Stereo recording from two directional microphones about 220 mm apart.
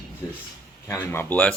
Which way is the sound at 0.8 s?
10° left (ahead or behind).